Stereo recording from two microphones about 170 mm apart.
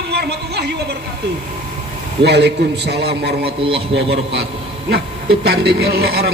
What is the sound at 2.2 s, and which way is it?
A man's voice, 80° right.